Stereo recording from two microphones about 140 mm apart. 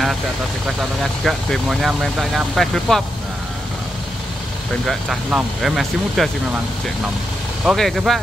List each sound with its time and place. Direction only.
1.2 s speech: centre (ahead or behind)
4.8 s speech: centre (ahead or behind)
7.6 s speech: centre (ahead or behind)